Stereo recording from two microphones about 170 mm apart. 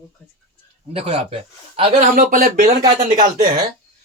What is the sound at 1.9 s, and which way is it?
Speech, 50° right (ahead or behind).